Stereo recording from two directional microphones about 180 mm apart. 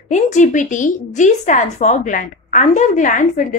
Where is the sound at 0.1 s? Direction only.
40° left (ahead or behind).